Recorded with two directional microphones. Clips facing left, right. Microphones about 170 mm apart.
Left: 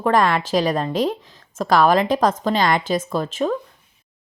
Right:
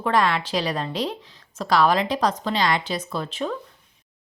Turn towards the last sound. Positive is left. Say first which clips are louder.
# left 6 dB
turn(degrees=45)  # may be behind; listen again after turning